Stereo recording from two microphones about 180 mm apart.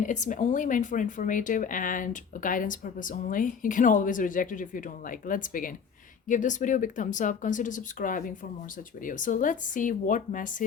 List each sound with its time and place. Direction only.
0.0 s speech: 45° left (ahead or behind)